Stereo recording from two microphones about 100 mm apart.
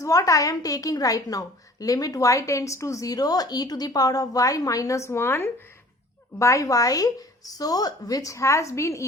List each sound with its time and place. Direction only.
0.0 s a woman's voice: 35° left (ahead or behind)